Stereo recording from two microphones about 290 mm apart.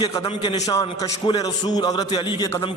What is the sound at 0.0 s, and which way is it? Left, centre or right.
A man's voice, centre.